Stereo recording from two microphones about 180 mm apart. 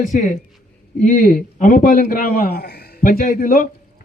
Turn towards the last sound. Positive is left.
turn(degrees=50)  # may be behind; listen again after turning